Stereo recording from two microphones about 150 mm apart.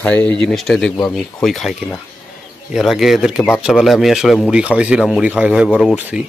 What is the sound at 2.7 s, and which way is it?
Speech, centre (ahead or behind).